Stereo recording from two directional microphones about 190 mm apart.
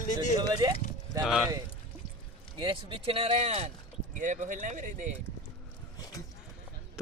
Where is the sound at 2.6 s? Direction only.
25° right (ahead or behind).